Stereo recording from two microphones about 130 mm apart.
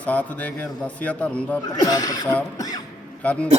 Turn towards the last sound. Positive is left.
turn(degrees=10)  # may be behind; listen again after turning